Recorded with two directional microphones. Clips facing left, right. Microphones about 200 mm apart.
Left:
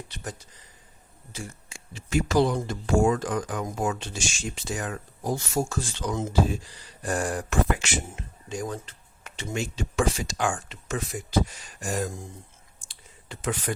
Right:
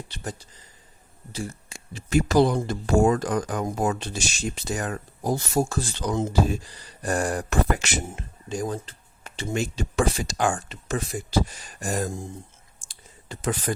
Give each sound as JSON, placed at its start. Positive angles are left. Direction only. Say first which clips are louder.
{"t": 0.1, "sound": "speech", "louder": "right 3 dB", "side_deg": -30}
{"t": 13.2, "sound": "speech", "louder": "right 2 dB", "side_deg": -40}